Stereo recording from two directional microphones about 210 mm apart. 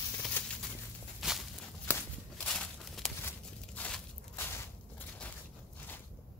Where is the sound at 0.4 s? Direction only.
10° left (ahead or behind).